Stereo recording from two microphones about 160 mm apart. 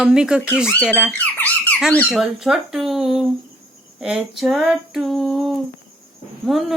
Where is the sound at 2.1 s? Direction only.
5° right (ahead or behind).